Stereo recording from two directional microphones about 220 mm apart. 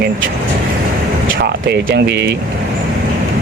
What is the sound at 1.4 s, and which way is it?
Speech, 50° right (ahead or behind).